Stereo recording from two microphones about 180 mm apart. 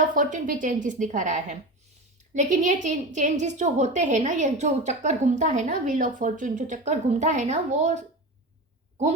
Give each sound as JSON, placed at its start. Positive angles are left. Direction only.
{"t": 0.0, "sound": "a woman's voice", "side_deg": -45}